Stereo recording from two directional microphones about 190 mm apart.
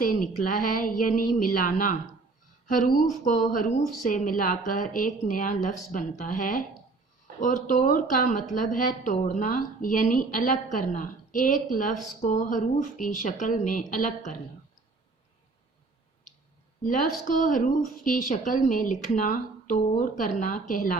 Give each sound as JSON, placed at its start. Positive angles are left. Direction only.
{"t": 0.0, "sound": "a woman's voice", "side_deg": 45}
{"t": 16.8, "sound": "a woman's voice", "side_deg": 45}